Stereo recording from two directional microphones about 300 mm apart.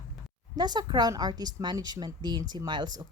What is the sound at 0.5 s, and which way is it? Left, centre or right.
A woman's voice, centre.